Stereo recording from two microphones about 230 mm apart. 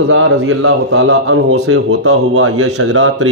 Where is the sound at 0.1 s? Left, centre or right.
Right.